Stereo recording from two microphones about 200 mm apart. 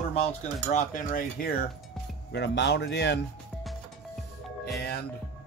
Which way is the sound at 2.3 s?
60° left (ahead or behind).